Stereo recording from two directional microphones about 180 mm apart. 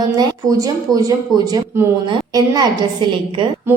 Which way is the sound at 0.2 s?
20° right (ahead or behind).